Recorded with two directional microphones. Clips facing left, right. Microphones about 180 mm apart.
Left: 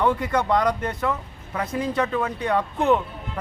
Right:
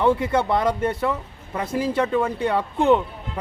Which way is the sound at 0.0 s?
25° right (ahead or behind).